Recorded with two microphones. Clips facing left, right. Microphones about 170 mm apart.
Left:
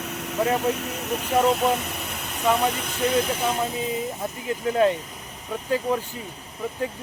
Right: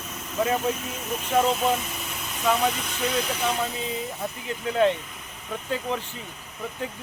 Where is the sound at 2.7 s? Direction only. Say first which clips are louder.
Left 4 dB; 55° left (ahead or behind).